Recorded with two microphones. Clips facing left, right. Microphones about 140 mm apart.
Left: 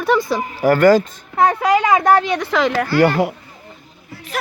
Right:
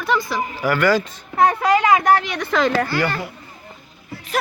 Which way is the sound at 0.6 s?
45° left (ahead or behind).